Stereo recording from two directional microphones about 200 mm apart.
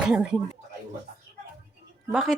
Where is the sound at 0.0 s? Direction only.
5° right (ahead or behind).